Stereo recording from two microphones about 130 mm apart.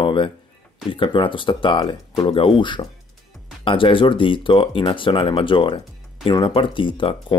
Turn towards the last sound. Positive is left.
turn(degrees=40)  # may be behind; listen again after turning